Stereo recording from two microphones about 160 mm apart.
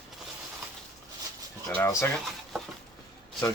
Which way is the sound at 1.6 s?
15° left (ahead or behind).